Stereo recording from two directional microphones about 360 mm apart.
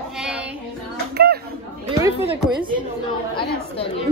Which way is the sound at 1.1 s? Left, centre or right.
Right.